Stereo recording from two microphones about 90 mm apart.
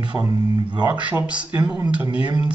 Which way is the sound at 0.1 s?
15° right (ahead or behind).